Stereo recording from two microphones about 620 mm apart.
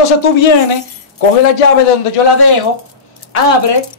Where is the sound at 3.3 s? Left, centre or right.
Left.